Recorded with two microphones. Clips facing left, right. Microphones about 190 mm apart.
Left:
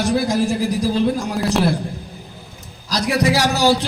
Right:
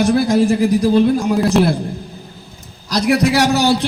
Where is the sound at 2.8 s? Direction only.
60° right (ahead or behind).